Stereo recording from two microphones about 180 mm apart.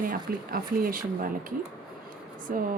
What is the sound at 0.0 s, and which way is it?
Speech, 55° right (ahead or behind).